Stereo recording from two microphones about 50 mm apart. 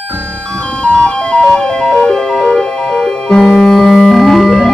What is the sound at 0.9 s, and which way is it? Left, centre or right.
Ice cream truck, centre.